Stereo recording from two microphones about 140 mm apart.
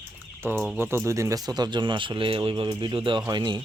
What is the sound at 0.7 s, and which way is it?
Speech, 15° right (ahead or behind).